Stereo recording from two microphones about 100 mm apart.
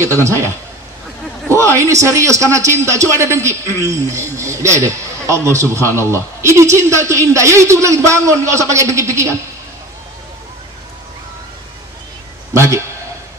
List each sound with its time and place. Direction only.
0.2 s a man's voice: 30° right (ahead or behind)
1.5 s a man's voice: 30° right (ahead or behind)
12.5 s a man's voice: 30° right (ahead or behind)